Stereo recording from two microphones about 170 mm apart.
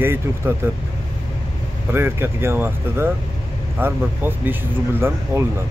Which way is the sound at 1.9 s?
15° right (ahead or behind).